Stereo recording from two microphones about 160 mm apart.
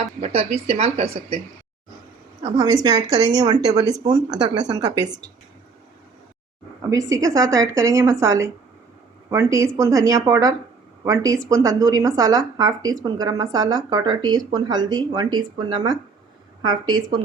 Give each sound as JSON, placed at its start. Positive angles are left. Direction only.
{"t": 0.2, "sound": "speech", "side_deg": -40}
{"t": 2.4, "sound": "speech", "side_deg": -25}
{"t": 6.9, "sound": "speech", "side_deg": -20}